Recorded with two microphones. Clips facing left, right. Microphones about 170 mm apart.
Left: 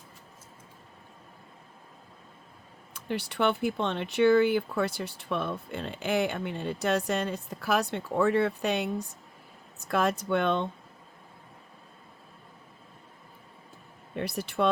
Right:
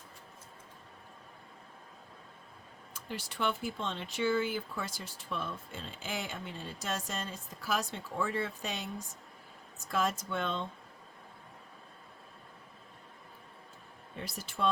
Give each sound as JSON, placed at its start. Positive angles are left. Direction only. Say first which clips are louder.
{"t": 2.9, "sound": "speech", "louder": "left 9 dB", "side_deg": 65}
{"t": 14.2, "sound": "speech", "louder": "left 7 dB", "side_deg": 65}